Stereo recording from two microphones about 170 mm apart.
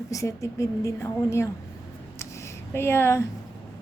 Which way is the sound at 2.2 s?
15° left (ahead or behind).